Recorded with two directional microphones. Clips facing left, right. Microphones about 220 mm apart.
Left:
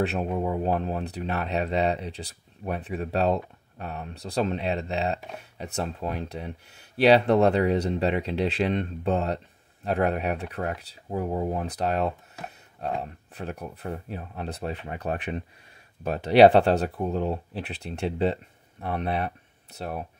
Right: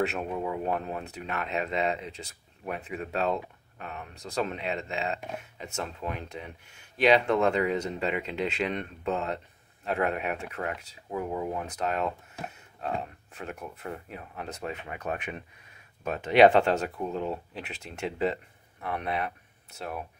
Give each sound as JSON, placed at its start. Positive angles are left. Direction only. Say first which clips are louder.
{"t": 0.0, "sound": "speech", "louder": "left 3 dB", "side_deg": 35}